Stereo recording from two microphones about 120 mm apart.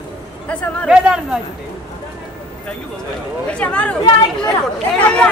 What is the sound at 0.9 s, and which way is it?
Speech, 5° right (ahead or behind).